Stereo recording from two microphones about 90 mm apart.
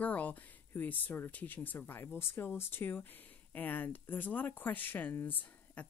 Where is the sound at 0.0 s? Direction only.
15° left (ahead or behind).